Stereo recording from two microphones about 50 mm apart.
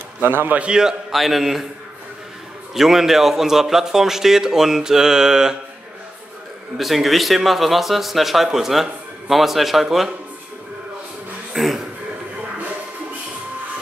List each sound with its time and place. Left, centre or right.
0.2 s a man's voice: right
0.6 s speech: centre
1.1 s speech: centre
2.7 s speech: centre
6.8 s speech: centre
11.5 s speech: centre